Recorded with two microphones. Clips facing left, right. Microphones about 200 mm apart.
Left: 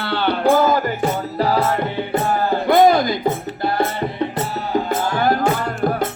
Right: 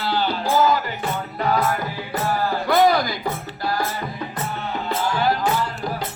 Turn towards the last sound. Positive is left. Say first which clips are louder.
# left 7 dB
turn(degrees=55)  # may be behind; listen again after turning